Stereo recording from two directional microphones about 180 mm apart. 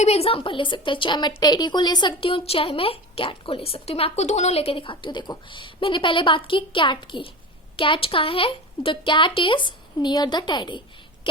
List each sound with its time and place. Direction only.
0.0 s a woman's voice: 35° left (ahead or behind)